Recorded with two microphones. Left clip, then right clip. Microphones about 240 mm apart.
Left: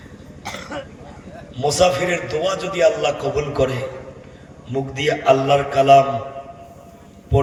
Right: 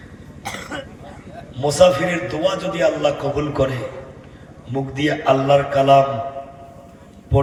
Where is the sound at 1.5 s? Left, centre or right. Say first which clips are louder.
Right 3 dB; left.